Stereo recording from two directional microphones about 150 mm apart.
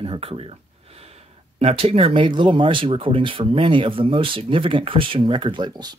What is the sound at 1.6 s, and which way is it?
Speech, 40° right (ahead or behind).